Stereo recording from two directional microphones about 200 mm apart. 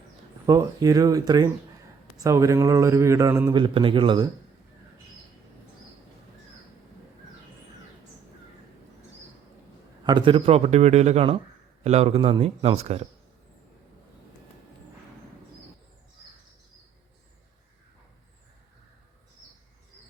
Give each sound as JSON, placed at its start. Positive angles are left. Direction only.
{"t": 0.4, "sound": "speech", "side_deg": -15}
{"t": 3.6, "sound": "a man's voice", "side_deg": -25}
{"t": 10.0, "sound": "a man's voice", "side_deg": -20}